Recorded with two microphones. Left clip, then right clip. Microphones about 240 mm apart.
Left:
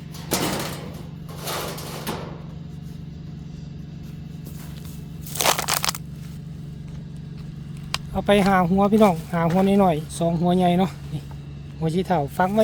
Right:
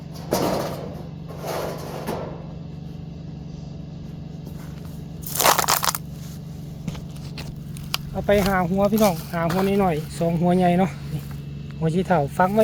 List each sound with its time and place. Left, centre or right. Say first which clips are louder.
0.3 s a sound: right 3 dB; left
1.5 s vehicle: right 2 dB; left
5.4 s crunch: right 3 dB; right
8.1 s speech: left 2 dB; left
10.2 s speech: even; left